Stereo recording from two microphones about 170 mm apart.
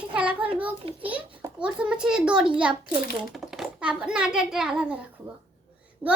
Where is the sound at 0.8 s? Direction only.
35° right (ahead or behind).